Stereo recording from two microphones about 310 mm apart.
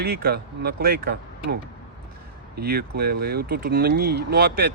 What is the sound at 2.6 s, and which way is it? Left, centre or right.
Speech, right.